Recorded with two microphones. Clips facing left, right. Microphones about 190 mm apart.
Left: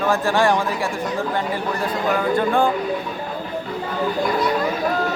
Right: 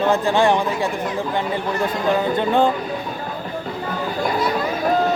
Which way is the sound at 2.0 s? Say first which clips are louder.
Even; 25° right (ahead or behind).